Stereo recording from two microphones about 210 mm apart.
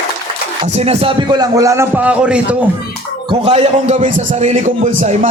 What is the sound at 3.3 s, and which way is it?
A man's voice, 25° right (ahead or behind).